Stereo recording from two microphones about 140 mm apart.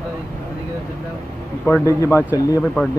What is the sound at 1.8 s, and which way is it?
Speech, 25° left (ahead or behind).